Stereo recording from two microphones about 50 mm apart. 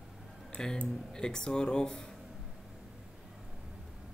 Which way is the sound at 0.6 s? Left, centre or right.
Centre.